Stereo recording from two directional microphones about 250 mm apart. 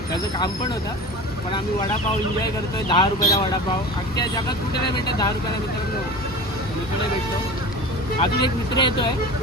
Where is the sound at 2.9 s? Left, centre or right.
Centre.